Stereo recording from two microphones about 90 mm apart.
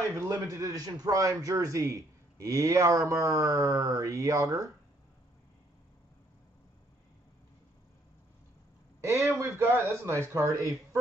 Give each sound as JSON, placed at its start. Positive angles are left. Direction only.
{"t": 0.3, "sound": "speech", "side_deg": -40}
{"t": 9.0, "sound": "speech", "side_deg": -30}